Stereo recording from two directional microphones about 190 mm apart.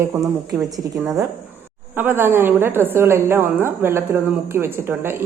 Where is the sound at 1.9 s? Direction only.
10° right (ahead or behind).